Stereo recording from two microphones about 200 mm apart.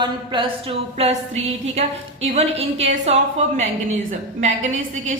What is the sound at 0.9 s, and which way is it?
A woman's voice, 30° right (ahead or behind).